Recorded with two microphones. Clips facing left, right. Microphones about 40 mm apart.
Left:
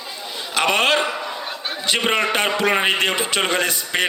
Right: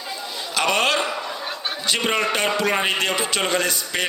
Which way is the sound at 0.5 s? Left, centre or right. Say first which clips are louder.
Left 2 dB; left.